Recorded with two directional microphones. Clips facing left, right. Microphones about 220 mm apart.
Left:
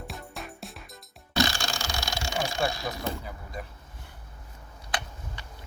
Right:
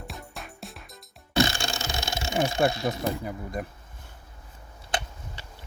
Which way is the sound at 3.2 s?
50° right (ahead or behind).